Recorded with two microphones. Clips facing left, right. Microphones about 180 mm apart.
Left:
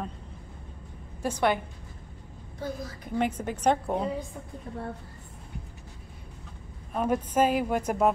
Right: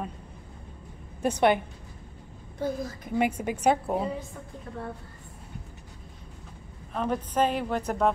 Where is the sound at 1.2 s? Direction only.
20° right (ahead or behind).